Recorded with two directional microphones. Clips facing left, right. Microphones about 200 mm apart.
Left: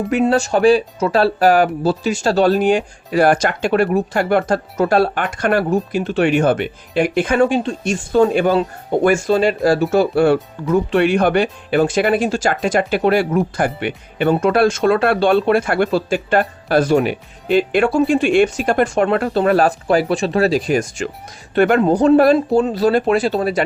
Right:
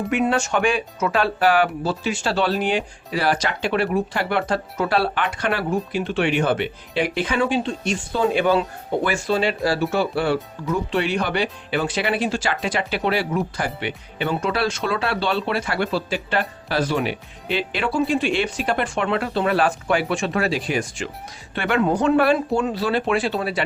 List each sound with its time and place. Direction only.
0.3 s speech: 35° left (ahead or behind)